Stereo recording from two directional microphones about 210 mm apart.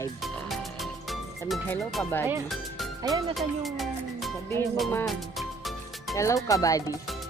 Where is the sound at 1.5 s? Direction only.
Centre (ahead or behind).